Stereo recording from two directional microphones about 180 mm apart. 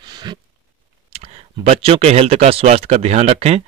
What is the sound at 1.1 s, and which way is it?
Speech, 35° right (ahead or behind).